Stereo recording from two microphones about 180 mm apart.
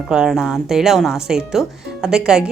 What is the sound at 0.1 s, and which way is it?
Speech, 5° right (ahead or behind).